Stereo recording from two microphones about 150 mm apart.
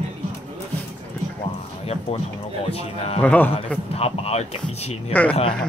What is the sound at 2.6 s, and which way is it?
Speech, 40° left (ahead or behind).